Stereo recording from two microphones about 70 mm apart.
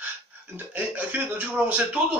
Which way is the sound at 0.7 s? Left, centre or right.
Right.